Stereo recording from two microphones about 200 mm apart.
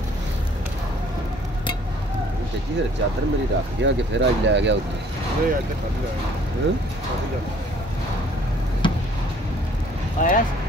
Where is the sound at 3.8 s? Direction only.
65° right (ahead or behind).